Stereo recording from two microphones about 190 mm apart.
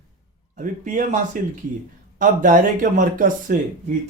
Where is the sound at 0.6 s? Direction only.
45° right (ahead or behind).